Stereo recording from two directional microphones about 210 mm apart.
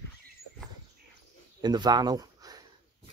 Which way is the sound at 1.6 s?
20° right (ahead or behind).